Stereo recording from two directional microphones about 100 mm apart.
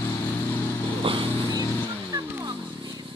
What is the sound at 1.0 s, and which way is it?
Vehicle, 60° right (ahead or behind).